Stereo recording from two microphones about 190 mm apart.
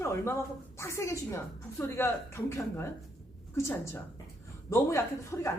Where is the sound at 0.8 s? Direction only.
15° left (ahead or behind).